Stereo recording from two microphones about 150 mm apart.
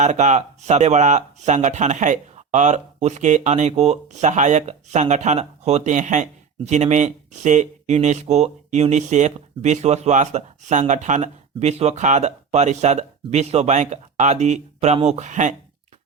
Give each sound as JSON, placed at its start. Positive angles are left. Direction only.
{"t": 0.0, "sound": "speech", "side_deg": -50}